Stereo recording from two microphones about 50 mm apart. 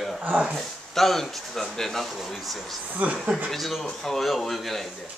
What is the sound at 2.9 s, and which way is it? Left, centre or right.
Speech, right.